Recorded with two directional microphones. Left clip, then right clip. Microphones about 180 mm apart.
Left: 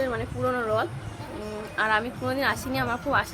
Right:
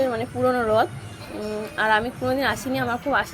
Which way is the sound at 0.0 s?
15° right (ahead or behind).